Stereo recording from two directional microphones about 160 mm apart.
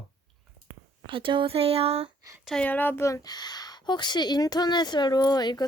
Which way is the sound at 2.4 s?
5° left (ahead or behind).